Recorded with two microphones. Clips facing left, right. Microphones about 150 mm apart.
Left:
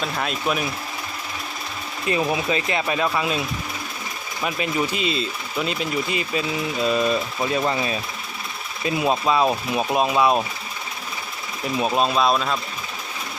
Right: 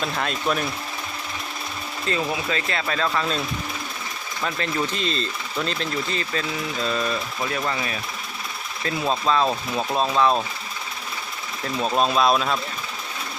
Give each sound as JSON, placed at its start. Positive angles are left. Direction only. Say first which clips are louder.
{"t": 0.0, "sound": "speech", "louder": "even", "side_deg": 0}
{"t": 2.0, "sound": "speech", "louder": "left 4 dB", "side_deg": 15}
{"t": 4.4, "sound": "speech", "louder": "left 2 dB", "side_deg": 10}
{"t": 11.6, "sound": "speech", "louder": "left 1 dB", "side_deg": 10}